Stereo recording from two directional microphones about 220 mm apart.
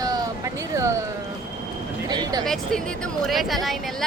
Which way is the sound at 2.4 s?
Centre (ahead or behind).